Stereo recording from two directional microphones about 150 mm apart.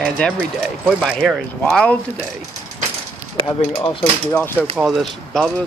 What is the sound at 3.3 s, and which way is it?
Speech, 25° left (ahead or behind).